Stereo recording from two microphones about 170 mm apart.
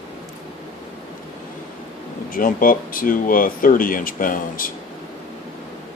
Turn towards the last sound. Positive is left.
turn(degrees=55)  # may be behind; listen again after turning